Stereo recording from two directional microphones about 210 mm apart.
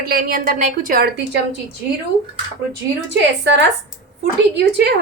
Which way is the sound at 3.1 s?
55° right (ahead or behind).